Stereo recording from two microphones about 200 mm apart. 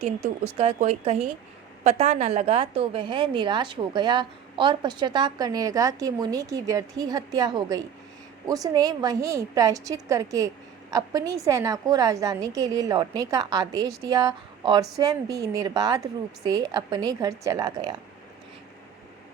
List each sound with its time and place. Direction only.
0.0 s a woman's voice: 30° right (ahead or behind)